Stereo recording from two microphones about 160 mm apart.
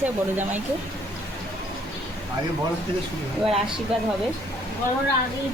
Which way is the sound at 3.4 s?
5° right (ahead or behind).